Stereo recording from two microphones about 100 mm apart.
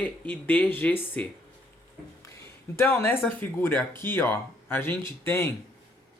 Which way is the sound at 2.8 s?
25° left (ahead or behind).